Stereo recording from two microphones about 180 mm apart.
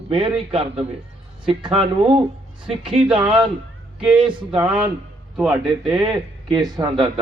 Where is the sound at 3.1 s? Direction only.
5° right (ahead or behind).